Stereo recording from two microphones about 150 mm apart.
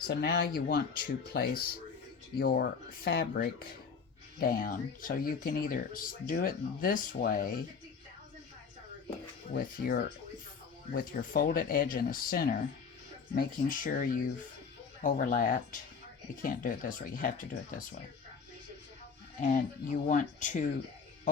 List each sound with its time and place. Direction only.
0.2 s speech: 90° left; by 7.5 s 65° left (ahead or behind)
9.5 s speech: 80° left
10.9 s speech: 70° left (ahead or behind)
19.4 s speech: 60° left (ahead or behind)